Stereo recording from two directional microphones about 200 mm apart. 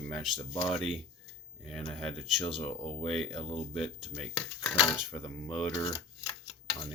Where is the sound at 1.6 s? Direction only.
Centre (ahead or behind).